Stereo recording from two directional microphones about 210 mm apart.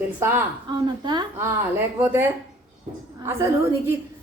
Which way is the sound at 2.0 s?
10° right (ahead or behind).